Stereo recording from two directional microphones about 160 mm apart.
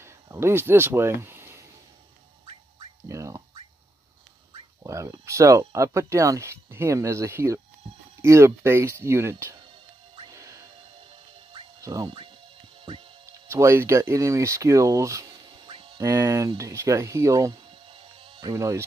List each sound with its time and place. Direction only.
0.0 s a sound: 15° right (ahead or behind)
3.1 s a sound: 20° right (ahead or behind)
4.8 s speech: 20° right (ahead or behind)
10.3 s music: 20° right (ahead or behind)
11.8 s speech: 20° right (ahead or behind)
13.5 s speech: 15° right (ahead or behind); by 16.0 s 35° right (ahead or behind)
16.0 s speech: 20° right (ahead or behind)
17.8 s music: 35° right (ahead or behind)